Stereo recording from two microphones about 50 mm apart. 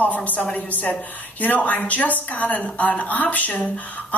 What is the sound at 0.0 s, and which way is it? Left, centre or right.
Speech, left.